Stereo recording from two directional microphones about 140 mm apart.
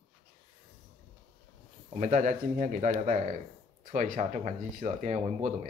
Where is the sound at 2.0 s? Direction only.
60° right (ahead or behind).